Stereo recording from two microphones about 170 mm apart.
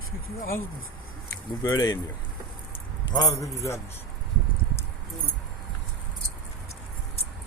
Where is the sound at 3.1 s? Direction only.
20° left (ahead or behind).